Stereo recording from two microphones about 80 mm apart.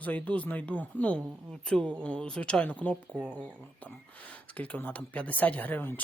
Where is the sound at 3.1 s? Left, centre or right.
Centre.